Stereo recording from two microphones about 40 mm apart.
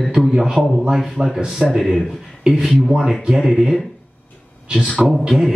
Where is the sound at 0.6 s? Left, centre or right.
Right.